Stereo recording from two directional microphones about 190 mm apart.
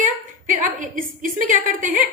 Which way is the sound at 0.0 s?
45° right (ahead or behind).